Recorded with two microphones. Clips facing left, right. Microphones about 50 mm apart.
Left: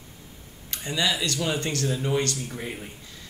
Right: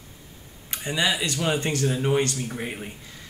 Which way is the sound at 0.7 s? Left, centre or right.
Right.